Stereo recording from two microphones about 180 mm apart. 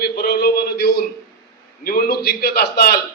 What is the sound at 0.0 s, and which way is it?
A man's voice, 60° left (ahead or behind).